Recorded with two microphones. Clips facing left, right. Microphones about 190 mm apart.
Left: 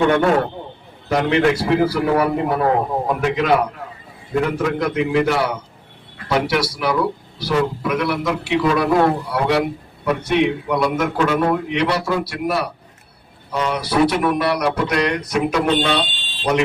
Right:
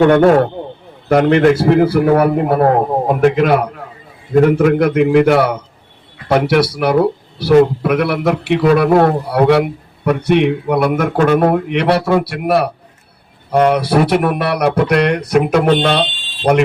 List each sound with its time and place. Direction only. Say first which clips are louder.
0.0 s speech: right 7 dB; 45° right (ahead or behind)